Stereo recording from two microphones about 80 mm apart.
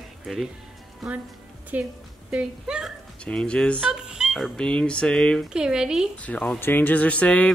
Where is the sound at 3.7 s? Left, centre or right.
Centre.